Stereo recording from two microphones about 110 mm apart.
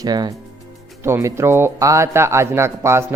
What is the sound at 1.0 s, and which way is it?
A man's voice, 25° right (ahead or behind).